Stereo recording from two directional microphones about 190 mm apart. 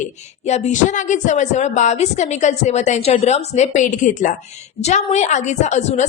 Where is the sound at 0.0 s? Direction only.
35° left (ahead or behind).